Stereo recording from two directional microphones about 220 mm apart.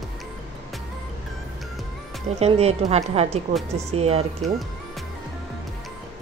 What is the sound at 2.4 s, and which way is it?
Speech, 30° right (ahead or behind).